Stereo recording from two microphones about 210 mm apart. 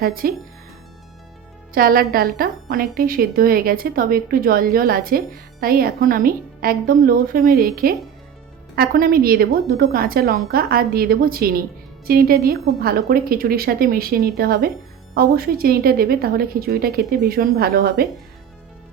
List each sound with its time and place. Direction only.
0.0 s speech: 45° right (ahead or behind)
1.7 s speech: 45° right (ahead or behind)